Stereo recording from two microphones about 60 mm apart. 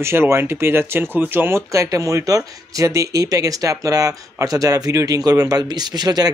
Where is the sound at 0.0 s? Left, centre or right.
Right.